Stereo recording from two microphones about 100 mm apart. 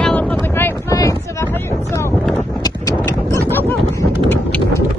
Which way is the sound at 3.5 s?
20° left (ahead or behind).